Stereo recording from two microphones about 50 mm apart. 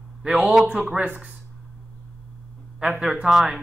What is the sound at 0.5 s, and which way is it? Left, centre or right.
Speech, centre.